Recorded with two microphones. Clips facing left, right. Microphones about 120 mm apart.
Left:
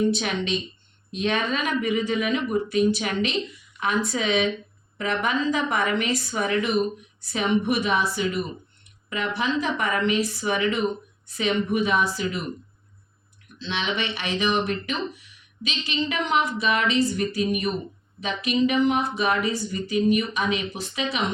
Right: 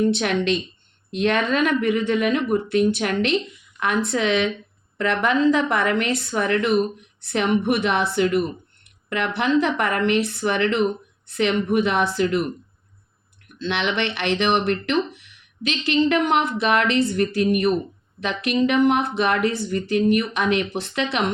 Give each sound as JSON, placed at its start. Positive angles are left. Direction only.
{"t": 0.1, "sound": "speech", "side_deg": -65}
{"t": 13.6, "sound": "speech", "side_deg": -65}